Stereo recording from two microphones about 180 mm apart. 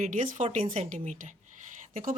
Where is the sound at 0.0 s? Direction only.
45° right (ahead or behind).